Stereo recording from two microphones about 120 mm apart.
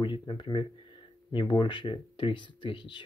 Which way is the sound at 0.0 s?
40° left (ahead or behind).